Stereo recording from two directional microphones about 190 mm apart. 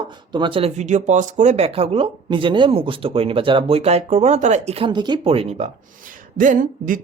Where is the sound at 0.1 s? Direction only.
25° right (ahead or behind).